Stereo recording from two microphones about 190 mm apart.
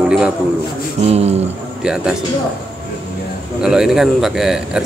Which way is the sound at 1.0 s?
35° right (ahead or behind).